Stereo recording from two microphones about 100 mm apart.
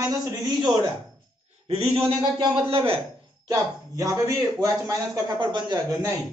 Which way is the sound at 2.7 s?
75° right (ahead or behind).